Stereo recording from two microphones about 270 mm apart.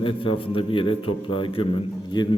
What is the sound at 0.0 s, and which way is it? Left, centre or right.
A man's voice, centre.